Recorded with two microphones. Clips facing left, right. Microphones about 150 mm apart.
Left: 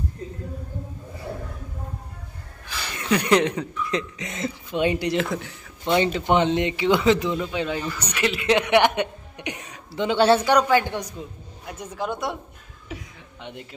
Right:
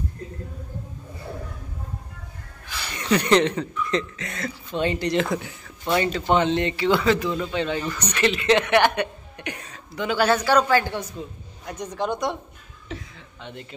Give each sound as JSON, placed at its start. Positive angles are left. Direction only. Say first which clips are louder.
{"t": 3.0, "sound": "a man's voice", "louder": "right 1 dB", "side_deg": 5}
{"t": 7.3, "sound": "a man's voice", "louder": "right 1 dB", "side_deg": 5}
{"t": 10.5, "sound": "a man's voice", "louder": "even", "side_deg": 15}